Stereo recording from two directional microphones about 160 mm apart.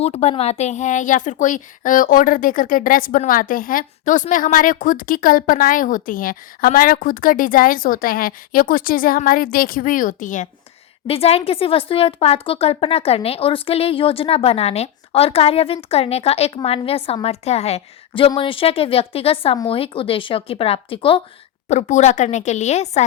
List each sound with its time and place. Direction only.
0.0 s speech: 40° left (ahead or behind)
11.0 s speech: 35° left (ahead or behind)
21.7 s speech: 45° left (ahead or behind)